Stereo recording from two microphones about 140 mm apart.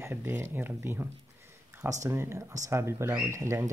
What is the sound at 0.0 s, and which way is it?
Speech, 15° right (ahead or behind).